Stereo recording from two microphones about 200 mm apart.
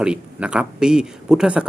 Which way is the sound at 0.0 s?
5° right (ahead or behind).